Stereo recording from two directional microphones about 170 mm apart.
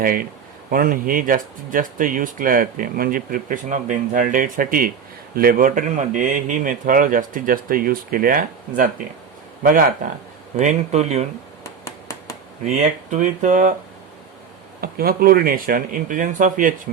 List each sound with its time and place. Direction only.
0.0 s a man's voice: 55° right (ahead or behind)
10.6 s speech: 40° right (ahead or behind)
11.6 s a sound: 20° left (ahead or behind)
12.6 s speech: 45° right (ahead or behind)
14.8 s a man's voice: 60° right (ahead or behind)